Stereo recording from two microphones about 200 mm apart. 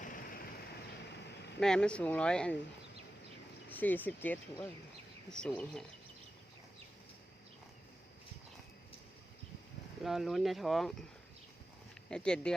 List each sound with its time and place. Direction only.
0.0 s vehicle: 45° left (ahead or behind)
1.5 s speech: 5° left (ahead or behind)
3.7 s speech: 10° left (ahead or behind)
10.0 s speech: centre (ahead or behind)
12.1 s speech: 5° left (ahead or behind)